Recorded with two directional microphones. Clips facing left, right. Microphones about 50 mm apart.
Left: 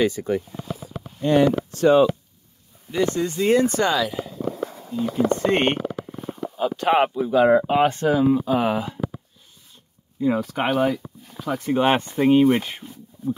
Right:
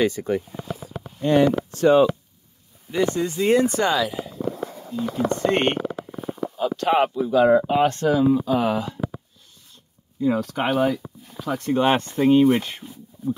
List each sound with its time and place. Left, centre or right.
0.0 s speech: right
1.4 s speech: centre
2.9 s speech: centre
5.9 s a sound: centre
6.4 s speech: centre
10.2 s speech: centre
13.2 s a sound: centre